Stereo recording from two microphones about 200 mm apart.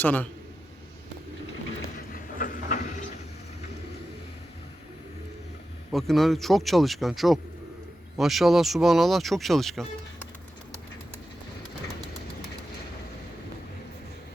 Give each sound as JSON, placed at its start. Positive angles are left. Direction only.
{"t": 0.0, "sound": "a man's voice", "side_deg": 10}
{"t": 2.1, "sound": "vehicle", "side_deg": 45}
{"t": 5.9, "sound": "speech", "side_deg": 0}